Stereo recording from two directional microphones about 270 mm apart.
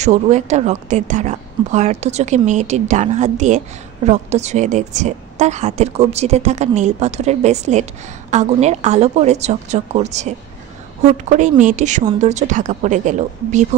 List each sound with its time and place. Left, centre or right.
0.0 s a woman's voice: right